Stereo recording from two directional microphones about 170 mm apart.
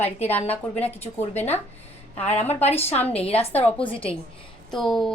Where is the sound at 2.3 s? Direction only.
40° left (ahead or behind).